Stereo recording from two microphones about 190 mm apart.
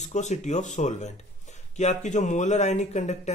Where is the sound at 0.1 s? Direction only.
35° left (ahead or behind).